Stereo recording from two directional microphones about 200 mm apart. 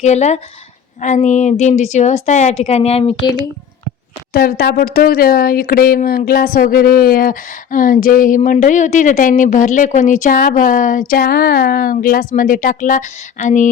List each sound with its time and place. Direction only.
0.0 s a woman's voice: 35° left (ahead or behind)
4.3 s a woman's voice: 50° left (ahead or behind)